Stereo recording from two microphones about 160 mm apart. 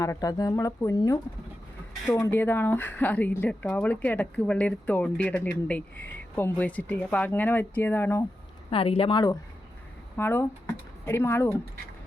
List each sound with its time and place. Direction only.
0.0 s speech: 20° left (ahead or behind)
8.7 s a woman's voice: 35° left (ahead or behind)
10.2 s speech: 15° left (ahead or behind)